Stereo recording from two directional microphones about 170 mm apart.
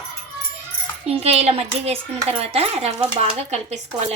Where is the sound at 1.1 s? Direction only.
35° right (ahead or behind).